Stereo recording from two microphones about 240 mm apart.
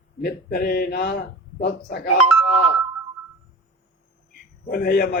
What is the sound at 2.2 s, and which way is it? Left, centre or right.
Speech, left.